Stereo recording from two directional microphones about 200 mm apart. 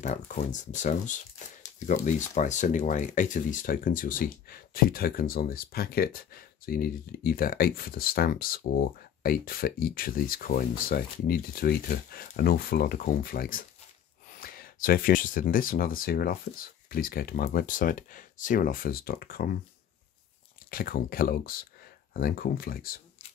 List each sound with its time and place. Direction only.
0.0 s speech: 40° left (ahead or behind)
20.7 s speech: 45° left (ahead or behind)